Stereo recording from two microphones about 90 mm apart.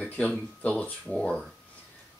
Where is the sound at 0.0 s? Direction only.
20° left (ahead or behind).